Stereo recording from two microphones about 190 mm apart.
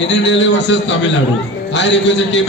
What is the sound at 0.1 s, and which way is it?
A man's voice, 70° left (ahead or behind).